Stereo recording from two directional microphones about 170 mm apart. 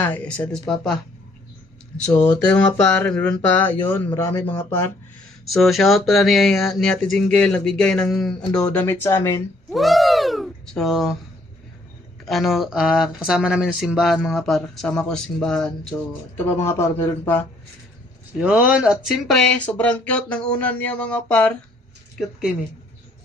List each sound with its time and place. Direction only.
0.0 s speech: 10° left (ahead or behind)
2.0 s speech: 40° left (ahead or behind)
2.5 s speech: 5° left (ahead or behind)
5.5 s speech: centre (ahead or behind)
9.7 s a sound: centre (ahead or behind)
12.2 s speech: centre (ahead or behind)
16.5 s speech: 15° left (ahead or behind)
18.3 s speech: 5° right (ahead or behind)
22.2 s speech: 5° right (ahead or behind)